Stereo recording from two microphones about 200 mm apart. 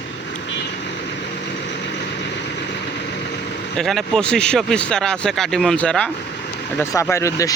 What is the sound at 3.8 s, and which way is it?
Speech, centre (ahead or behind).